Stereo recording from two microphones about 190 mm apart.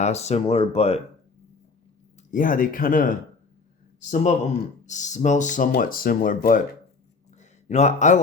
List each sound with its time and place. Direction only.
0.0 s speech: 35° left (ahead or behind)
2.3 s speech: 45° left (ahead or behind)
7.3 s a sound: 35° left (ahead or behind)